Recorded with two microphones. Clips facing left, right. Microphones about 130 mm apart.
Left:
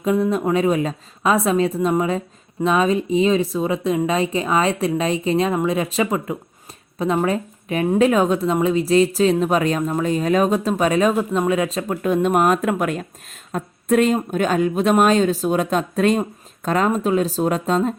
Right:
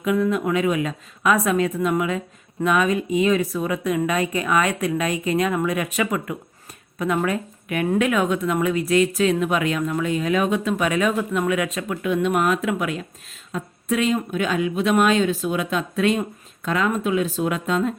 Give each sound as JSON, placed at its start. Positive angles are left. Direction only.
{"t": 0.0, "sound": "a woman's voice", "side_deg": 30}